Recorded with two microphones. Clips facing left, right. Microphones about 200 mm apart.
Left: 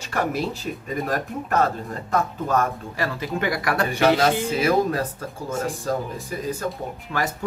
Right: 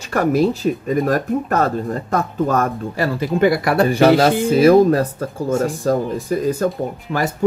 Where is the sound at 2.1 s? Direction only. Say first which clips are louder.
Right 3 dB; 40° right (ahead or behind).